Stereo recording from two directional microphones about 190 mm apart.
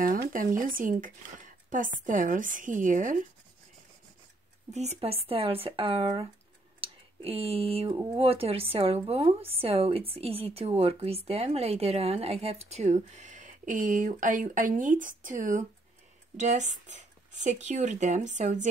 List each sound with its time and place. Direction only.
0.0 s speech: 45° right (ahead or behind)
4.7 s a woman's voice: 35° right (ahead or behind)